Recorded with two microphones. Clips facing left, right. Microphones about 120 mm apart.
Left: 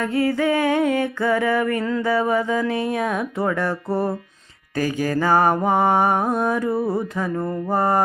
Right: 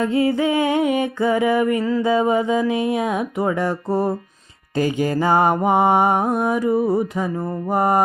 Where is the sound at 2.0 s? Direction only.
15° right (ahead or behind).